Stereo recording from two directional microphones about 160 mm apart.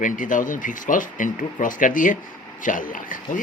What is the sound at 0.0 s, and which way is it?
Speech, 55° left (ahead or behind).